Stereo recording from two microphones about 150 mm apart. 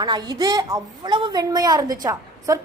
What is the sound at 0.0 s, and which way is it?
A woman's voice, 25° right (ahead or behind).